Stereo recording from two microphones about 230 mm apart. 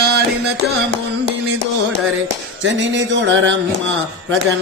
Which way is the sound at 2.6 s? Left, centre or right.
Right.